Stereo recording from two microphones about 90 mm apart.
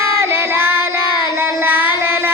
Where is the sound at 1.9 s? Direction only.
25° right (ahead or behind).